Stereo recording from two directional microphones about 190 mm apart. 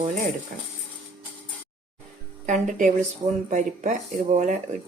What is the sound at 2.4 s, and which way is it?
Speech, 40° right (ahead or behind).